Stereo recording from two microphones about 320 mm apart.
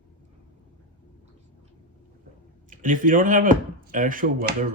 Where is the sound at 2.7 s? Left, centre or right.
Right.